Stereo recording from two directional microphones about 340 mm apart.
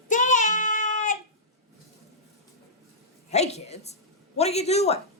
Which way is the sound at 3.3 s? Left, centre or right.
Centre.